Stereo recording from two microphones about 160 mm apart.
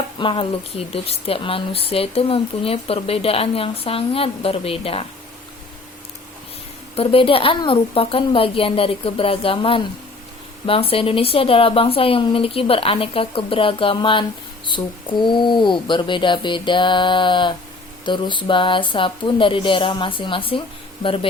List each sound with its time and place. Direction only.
0.2 s speech: 30° left (ahead or behind)
6.9 s speech: 35° left (ahead or behind)